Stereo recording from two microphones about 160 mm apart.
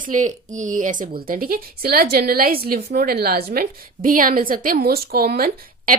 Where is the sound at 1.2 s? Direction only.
65° right (ahead or behind).